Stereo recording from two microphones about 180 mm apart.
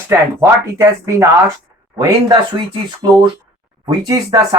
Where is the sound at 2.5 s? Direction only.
25° right (ahead or behind).